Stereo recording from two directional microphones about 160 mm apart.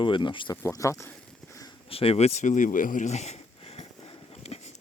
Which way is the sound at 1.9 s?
35° left (ahead or behind).